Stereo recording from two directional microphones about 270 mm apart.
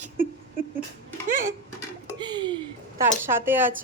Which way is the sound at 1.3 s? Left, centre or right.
Right.